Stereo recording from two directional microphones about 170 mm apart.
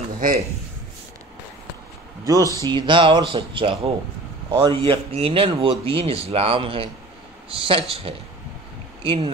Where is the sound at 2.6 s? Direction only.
30° right (ahead or behind).